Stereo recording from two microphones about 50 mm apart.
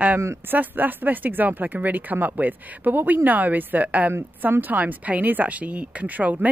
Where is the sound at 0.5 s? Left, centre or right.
Right.